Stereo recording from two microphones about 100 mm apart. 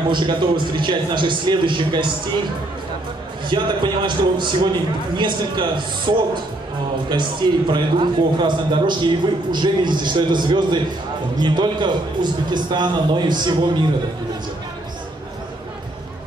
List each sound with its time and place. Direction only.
0.1 s a man's voice: 50° right (ahead or behind)
3.4 s a man's voice: 50° right (ahead or behind)